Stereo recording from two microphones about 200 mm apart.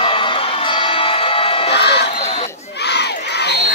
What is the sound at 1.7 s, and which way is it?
Crowd, 55° left (ahead or behind).